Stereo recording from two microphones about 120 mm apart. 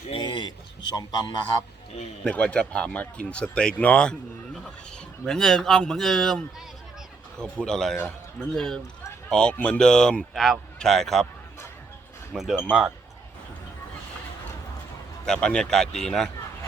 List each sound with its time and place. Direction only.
0.2 s a sound: 40° left (ahead or behind)
0.9 s a man's voice: 35° left (ahead or behind)
2.2 s speech: 10° left (ahead or behind)
12.3 s speech: centre (ahead or behind)
15.2 s speech: 5° left (ahead or behind)